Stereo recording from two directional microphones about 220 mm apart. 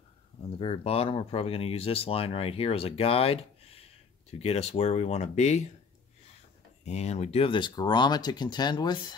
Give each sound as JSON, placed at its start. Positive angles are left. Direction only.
{"t": 0.6, "sound": "speech", "side_deg": 25}
{"t": 6.8, "sound": "speech", "side_deg": 30}